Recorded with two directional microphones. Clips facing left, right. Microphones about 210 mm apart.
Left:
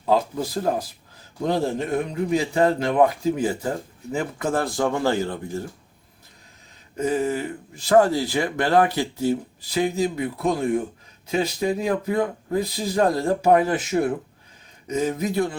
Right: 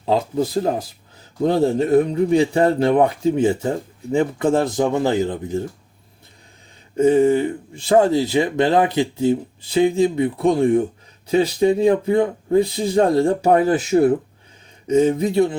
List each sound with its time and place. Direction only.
0.0 s a man's voice: 25° right (ahead or behind)
6.9 s speech: 25° right (ahead or behind)